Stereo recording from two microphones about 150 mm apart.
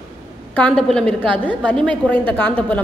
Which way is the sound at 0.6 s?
5° left (ahead or behind).